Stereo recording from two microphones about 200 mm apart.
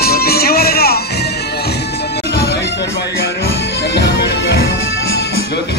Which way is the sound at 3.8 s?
60° left (ahead or behind).